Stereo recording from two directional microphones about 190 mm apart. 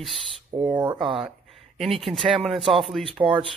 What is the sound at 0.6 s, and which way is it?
Speech, 25° right (ahead or behind).